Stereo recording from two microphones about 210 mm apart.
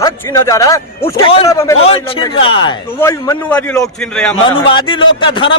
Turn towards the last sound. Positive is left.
turn(degrees=25)  # may be behind; listen again after turning